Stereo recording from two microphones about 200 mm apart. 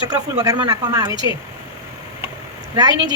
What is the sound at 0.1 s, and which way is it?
Speech, 20° right (ahead or behind).